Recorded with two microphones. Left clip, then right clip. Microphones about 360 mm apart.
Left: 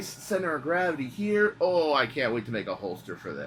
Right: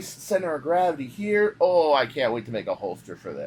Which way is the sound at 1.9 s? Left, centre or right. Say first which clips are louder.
Right 4 dB; centre.